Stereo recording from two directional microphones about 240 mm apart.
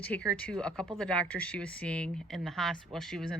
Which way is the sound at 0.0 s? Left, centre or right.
Centre.